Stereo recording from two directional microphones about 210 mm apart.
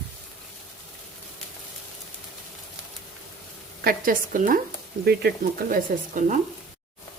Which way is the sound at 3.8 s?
40° right (ahead or behind).